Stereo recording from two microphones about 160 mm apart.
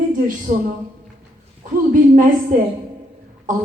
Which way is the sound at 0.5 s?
60° right (ahead or behind).